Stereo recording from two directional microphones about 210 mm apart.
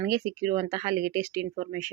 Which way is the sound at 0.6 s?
30° right (ahead or behind).